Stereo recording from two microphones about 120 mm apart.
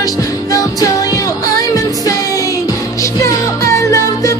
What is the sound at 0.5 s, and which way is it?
Music, 30° left (ahead or behind).